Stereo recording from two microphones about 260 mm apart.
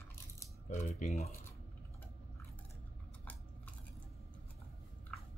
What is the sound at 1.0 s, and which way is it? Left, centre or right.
Speech, left.